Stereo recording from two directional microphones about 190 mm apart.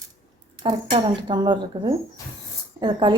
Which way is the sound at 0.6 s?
25° right (ahead or behind).